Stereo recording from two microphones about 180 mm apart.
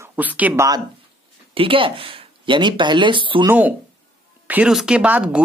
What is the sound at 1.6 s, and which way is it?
Speech, 30° right (ahead or behind).